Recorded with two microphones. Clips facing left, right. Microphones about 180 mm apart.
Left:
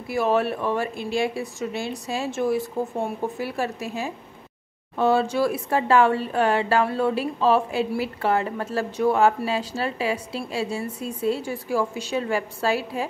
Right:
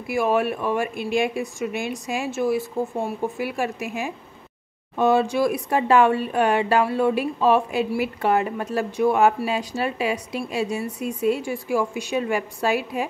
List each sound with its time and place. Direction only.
0.0 s speech: 15° right (ahead or behind)